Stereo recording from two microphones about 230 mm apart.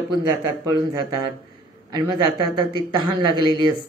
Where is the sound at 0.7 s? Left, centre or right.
Centre.